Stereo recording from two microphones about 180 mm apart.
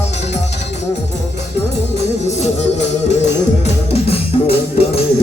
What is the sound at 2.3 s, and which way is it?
Music, 40° left (ahead or behind).